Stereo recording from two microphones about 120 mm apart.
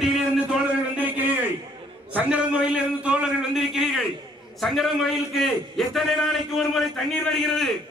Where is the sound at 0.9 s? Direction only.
15° right (ahead or behind); by 7.7 s centre (ahead or behind).